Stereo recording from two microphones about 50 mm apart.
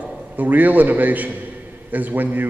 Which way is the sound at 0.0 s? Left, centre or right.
Right.